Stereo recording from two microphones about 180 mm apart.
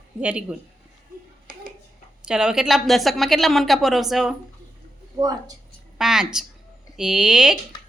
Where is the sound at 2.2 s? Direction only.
5° right (ahead or behind).